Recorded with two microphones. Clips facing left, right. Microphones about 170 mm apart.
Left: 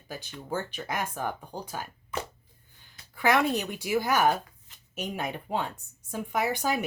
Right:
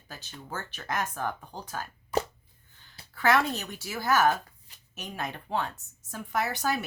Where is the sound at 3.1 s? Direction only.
15° left (ahead or behind).